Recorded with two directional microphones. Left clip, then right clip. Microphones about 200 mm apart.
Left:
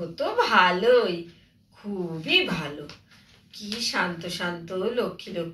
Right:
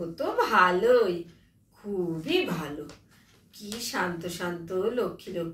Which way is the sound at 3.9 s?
5° right (ahead or behind).